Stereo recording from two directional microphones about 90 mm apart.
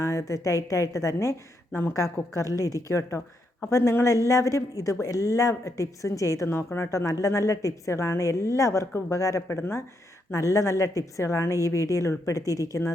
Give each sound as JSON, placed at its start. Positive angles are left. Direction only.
{"t": 0.0, "sound": "speech", "side_deg": 35}